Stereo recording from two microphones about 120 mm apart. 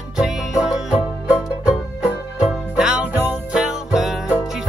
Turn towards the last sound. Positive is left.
turn(degrees=-5)  # may be behind; listen again after turning